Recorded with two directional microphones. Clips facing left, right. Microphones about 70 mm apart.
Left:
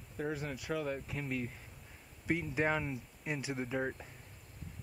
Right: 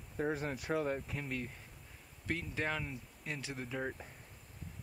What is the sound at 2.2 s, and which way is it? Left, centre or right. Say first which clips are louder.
Speech: left 5 dB; centre.